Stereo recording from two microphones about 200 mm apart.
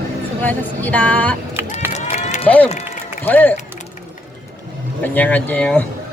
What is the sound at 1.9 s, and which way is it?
Run, 35° left (ahead or behind).